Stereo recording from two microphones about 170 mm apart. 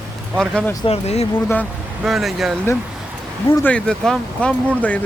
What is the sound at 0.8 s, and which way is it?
Speech, 40° left (ahead or behind).